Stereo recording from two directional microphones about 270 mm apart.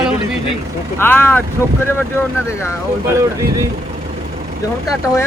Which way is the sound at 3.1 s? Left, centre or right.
Centre.